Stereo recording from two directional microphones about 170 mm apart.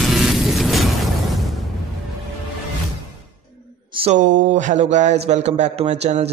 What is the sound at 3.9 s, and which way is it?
Speech, 40° right (ahead or behind).